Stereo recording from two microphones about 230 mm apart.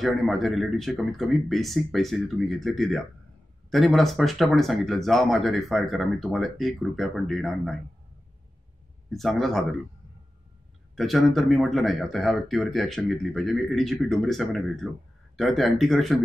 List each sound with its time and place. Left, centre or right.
0.0 s speech: centre
9.1 s speech: centre
11.0 s speech: centre